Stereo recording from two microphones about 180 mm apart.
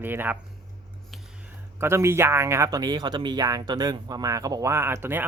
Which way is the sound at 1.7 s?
15° right (ahead or behind).